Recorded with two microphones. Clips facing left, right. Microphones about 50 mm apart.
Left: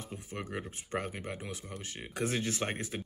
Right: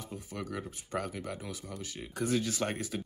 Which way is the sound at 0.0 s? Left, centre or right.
Left.